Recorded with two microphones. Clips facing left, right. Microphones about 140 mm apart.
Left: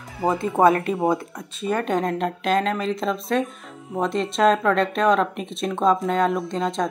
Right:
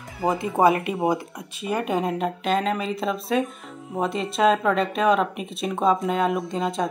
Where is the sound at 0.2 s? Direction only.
10° right (ahead or behind).